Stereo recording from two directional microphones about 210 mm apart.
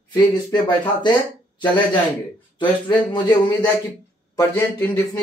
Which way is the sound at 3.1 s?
20° left (ahead or behind).